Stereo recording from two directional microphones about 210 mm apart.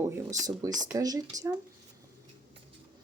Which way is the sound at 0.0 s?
15° right (ahead or behind).